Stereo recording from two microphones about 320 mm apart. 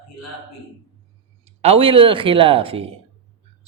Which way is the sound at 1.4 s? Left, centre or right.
Centre.